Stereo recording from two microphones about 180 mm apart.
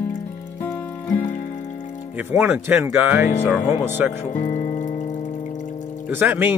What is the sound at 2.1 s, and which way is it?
Speech, 10° right (ahead or behind).